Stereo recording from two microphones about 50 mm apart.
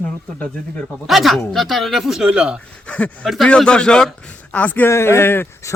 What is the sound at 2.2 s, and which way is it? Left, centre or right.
Speech, right.